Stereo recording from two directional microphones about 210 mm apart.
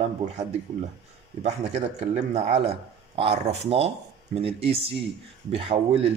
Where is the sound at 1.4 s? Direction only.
30° right (ahead or behind).